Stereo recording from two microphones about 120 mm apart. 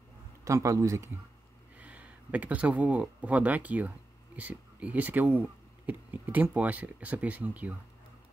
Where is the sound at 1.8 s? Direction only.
10° right (ahead or behind).